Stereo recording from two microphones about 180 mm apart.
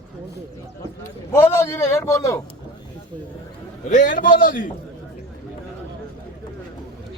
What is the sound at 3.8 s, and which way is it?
Speech, 45° left (ahead or behind).